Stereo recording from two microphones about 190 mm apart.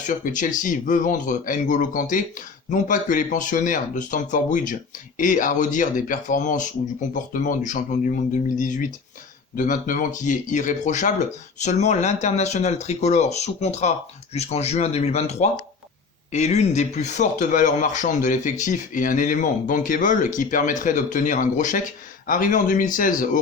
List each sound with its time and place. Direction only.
0.1 s speech: 45° left (ahead or behind)